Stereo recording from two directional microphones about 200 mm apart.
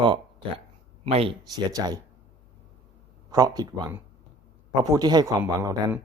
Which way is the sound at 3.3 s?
20° right (ahead or behind).